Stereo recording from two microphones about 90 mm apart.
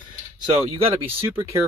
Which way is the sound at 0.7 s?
25° right (ahead or behind).